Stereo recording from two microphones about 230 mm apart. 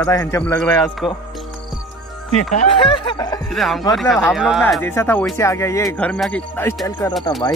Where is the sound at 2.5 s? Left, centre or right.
Left.